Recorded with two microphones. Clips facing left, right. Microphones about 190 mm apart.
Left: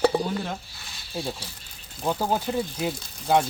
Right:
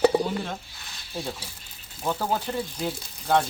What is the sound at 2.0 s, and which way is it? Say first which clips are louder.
Speech: left 2 dB; 10° left (ahead or behind).